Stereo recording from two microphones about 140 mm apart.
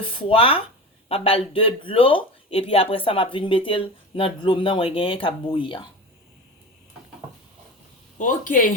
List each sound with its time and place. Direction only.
0.0 s speech: 40° left (ahead or behind)
8.2 s speech: 70° left (ahead or behind)